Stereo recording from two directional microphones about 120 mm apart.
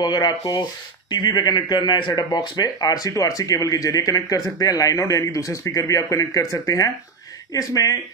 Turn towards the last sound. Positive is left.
turn(degrees=30)  # may be behind; listen again after turning